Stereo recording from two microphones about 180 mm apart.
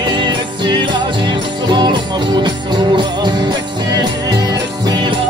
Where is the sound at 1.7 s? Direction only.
25° right (ahead or behind).